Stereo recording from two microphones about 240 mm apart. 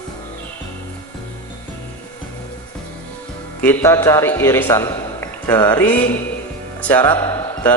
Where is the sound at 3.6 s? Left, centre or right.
Centre.